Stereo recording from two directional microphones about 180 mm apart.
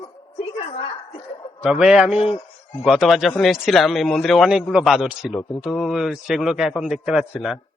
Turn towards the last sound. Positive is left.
turn(degrees=0)  # may be behind; listen again after turning